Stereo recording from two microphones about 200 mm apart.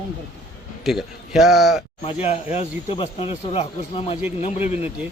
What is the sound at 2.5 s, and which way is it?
Speech, 25° left (ahead or behind).